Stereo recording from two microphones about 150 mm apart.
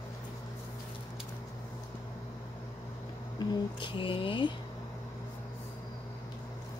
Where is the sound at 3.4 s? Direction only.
35° left (ahead or behind).